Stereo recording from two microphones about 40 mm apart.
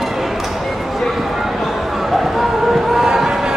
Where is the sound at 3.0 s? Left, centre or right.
Centre.